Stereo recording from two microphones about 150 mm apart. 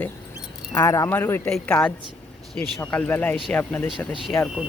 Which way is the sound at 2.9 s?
10° left (ahead or behind).